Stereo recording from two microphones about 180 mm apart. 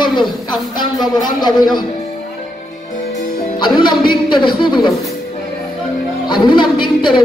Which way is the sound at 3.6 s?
25° left (ahead or behind).